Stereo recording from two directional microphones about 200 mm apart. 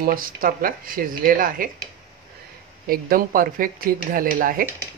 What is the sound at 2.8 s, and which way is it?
Speech, 45° right (ahead or behind).